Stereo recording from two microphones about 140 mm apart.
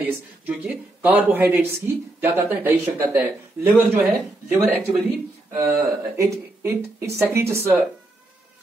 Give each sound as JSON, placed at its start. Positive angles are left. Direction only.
{"t": 0.0, "sound": "speech", "side_deg": -10}